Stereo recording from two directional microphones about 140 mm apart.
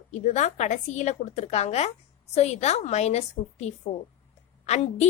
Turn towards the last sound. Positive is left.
turn(degrees=50)  # may be behind; listen again after turning